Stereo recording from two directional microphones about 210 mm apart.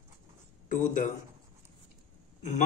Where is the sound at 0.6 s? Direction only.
35° left (ahead or behind).